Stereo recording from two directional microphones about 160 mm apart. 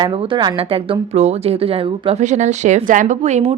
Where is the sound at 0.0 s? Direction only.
35° right (ahead or behind).